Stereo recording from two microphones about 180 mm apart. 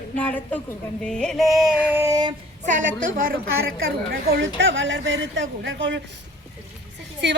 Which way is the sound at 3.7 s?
60° right (ahead or behind).